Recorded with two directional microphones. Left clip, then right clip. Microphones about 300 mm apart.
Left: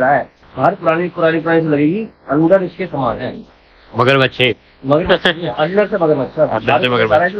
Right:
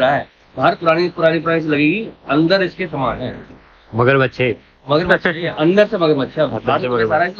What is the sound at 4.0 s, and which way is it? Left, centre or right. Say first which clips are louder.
Speech: left 2 dB; centre.